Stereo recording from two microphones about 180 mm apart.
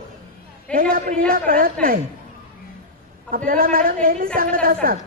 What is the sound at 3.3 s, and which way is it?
A woman's voice, 50° right (ahead or behind).